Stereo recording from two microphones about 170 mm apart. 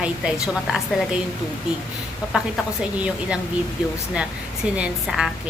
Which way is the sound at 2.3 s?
5° right (ahead or behind).